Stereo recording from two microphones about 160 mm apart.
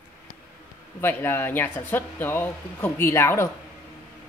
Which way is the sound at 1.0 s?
15° left (ahead or behind).